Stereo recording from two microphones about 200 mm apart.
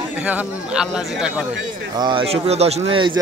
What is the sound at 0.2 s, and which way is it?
Speech, 5° right (ahead or behind).